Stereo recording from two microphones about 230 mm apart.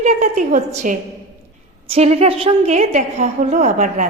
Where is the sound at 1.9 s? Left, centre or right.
Right.